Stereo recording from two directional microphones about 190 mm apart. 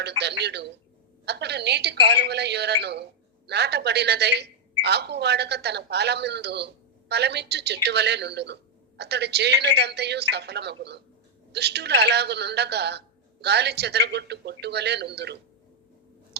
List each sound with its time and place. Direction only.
0.0 s a woman's voice: 60° right (ahead or behind)